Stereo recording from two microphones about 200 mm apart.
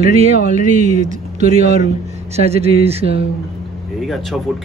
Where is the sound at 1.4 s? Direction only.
35° right (ahead or behind).